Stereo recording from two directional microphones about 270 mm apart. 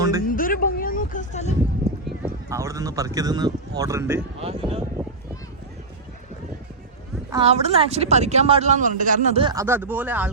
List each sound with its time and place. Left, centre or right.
0.2 s a sound: left
2.0 s speech: centre
4.4 s speech: right
7.3 s speech: centre